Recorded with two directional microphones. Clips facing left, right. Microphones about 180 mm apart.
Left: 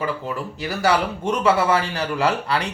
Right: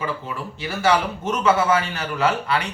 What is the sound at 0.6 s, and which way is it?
A man's voice, 35° left (ahead or behind).